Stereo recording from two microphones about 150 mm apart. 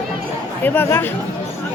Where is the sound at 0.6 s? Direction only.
15° left (ahead or behind).